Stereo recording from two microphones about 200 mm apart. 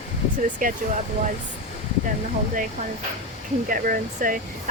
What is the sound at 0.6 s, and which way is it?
Speech, 40° right (ahead or behind).